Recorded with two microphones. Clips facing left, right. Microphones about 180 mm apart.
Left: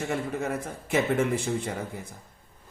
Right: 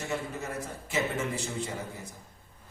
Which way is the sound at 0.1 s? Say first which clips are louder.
Left 4 dB; 55° left (ahead or behind).